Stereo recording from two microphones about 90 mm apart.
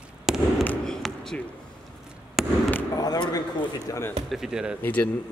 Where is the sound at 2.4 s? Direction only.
5° right (ahead or behind).